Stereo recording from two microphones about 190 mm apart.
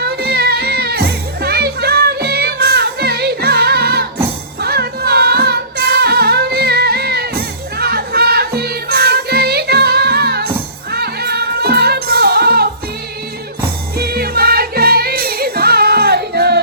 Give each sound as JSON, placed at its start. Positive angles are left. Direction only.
{"t": 0.0, "sound": "music", "side_deg": -55}
{"t": 13.9, "sound": "music", "side_deg": -55}